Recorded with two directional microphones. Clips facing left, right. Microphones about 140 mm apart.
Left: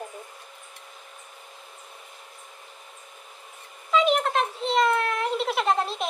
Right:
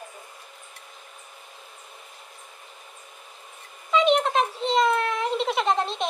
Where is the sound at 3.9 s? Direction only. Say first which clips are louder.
Right 2 dB; centre (ahead or behind).